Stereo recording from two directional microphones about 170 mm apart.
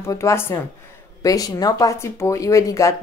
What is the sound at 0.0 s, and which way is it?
Speech, 15° left (ahead or behind).